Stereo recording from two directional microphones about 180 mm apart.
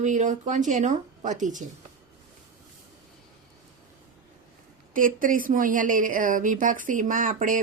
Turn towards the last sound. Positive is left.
turn(degrees=-45)  # may be behind; listen again after turning